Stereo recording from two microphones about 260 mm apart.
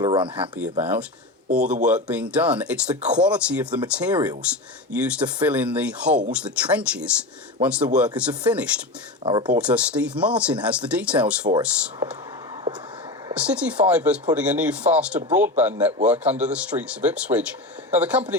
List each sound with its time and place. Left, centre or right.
0.0 s speech: centre
0.5 s speech: centre
9.2 s speech: right
9.6 s speech: centre
13.6 s speech: centre